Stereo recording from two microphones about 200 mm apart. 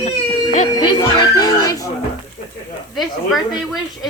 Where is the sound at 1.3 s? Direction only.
15° left (ahead or behind).